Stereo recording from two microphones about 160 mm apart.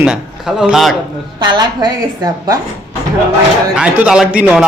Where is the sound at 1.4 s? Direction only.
25° right (ahead or behind).